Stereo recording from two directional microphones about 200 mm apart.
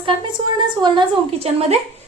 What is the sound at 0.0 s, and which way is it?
A woman's voice, 20° right (ahead or behind).